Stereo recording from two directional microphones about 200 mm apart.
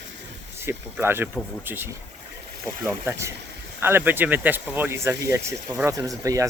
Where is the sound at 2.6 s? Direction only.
10° right (ahead or behind).